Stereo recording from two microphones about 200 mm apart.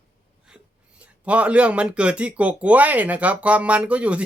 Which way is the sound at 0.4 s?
5° right (ahead or behind).